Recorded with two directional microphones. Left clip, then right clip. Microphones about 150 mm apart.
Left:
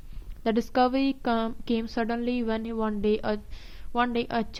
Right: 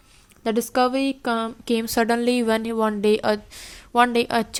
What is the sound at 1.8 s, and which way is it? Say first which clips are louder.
Speech: right 12 dB; 35° right (ahead or behind).